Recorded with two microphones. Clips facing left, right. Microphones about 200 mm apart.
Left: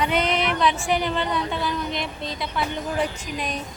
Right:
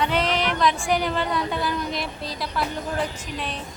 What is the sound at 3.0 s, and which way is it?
Speech, 10° left (ahead or behind).